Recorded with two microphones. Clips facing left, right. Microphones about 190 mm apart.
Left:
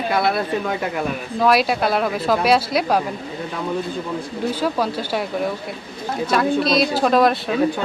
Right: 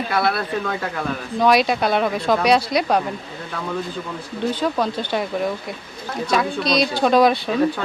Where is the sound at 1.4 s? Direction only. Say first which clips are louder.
Even; 5° left (ahead or behind).